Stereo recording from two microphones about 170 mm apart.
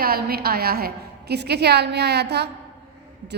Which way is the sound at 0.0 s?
65° right (ahead or behind).